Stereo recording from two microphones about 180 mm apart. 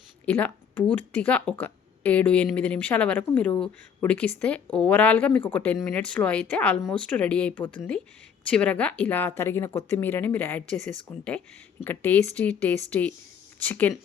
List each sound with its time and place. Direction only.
0.3 s speech: 10° left (ahead or behind)